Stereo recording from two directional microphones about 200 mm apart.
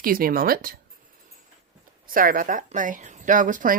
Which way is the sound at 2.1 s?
45° right (ahead or behind).